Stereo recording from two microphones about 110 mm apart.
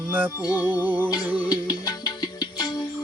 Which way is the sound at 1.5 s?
35° left (ahead or behind).